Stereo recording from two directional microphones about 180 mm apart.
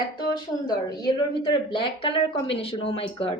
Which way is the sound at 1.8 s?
30° left (ahead or behind).